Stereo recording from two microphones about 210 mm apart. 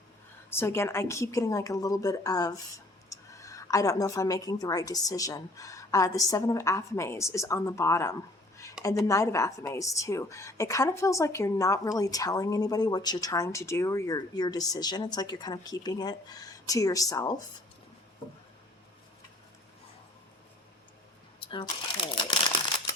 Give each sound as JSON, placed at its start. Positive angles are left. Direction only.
{"t": 0.5, "sound": "a woman's voice", "side_deg": 10}
{"t": 21.4, "sound": "speech", "side_deg": 20}